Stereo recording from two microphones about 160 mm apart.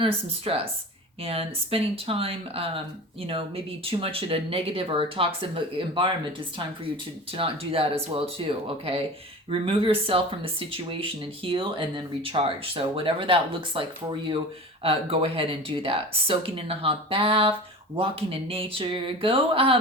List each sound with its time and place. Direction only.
0.0 s speech: 35° right (ahead or behind)
14.8 s speech: 35° right (ahead or behind)